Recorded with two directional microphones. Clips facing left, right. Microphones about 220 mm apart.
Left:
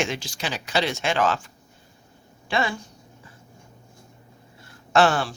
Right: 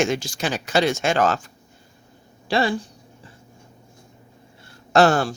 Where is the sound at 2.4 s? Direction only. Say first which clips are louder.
Right 5 dB; 35° right (ahead or behind).